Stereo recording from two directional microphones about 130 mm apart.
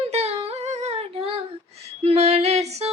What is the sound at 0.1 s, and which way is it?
Humming, 55° right (ahead or behind).